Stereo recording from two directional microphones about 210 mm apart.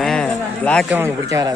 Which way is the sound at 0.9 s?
10° right (ahead or behind).